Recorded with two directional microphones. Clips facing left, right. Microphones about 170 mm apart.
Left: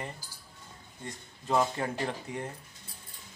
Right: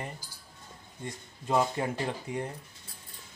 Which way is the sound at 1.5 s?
15° right (ahead or behind).